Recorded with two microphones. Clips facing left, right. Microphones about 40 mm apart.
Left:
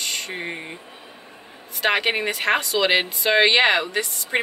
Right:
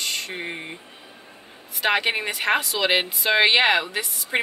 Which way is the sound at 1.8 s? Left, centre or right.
Centre.